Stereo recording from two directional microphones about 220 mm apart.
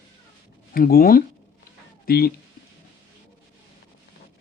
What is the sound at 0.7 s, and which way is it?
Speech, 40° left (ahead or behind).